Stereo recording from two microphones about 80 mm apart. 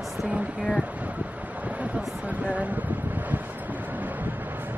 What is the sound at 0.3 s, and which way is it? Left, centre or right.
Speech, centre.